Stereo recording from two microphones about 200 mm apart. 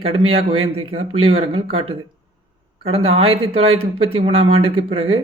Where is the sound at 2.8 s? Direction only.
30° right (ahead or behind).